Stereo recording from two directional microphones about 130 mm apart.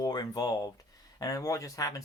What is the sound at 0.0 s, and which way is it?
Speech, 30° left (ahead or behind).